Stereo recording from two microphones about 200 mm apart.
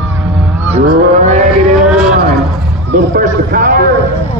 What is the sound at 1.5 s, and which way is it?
Vehicle, centre (ahead or behind).